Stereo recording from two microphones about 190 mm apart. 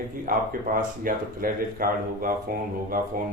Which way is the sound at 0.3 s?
50° right (ahead or behind).